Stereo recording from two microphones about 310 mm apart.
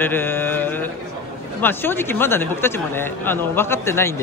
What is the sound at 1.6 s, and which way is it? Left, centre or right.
A man's voice, centre.